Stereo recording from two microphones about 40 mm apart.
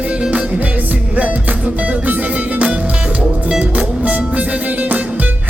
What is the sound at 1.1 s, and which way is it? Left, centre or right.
Music, right.